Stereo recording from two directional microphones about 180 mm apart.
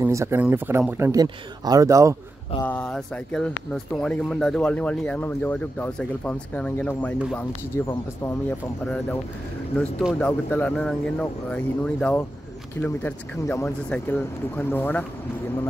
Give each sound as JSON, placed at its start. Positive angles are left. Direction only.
{"t": 0.0, "sound": "speech", "side_deg": -15}
{"t": 2.6, "sound": "speech", "side_deg": 5}